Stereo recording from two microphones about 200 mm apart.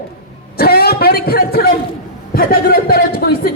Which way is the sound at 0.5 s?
50° left (ahead or behind).